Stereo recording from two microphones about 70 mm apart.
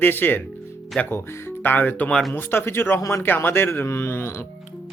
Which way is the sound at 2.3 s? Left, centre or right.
Left.